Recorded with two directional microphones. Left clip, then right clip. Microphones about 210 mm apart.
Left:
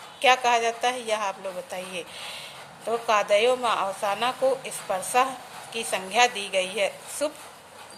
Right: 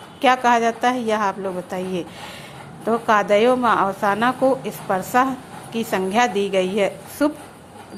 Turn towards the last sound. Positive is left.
turn(degrees=-15)  # may be behind; listen again after turning